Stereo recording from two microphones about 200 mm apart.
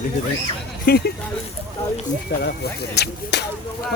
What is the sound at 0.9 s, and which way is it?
Speech, 50° left (ahead or behind).